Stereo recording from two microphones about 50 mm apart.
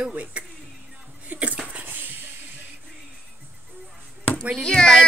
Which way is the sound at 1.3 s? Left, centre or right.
Right.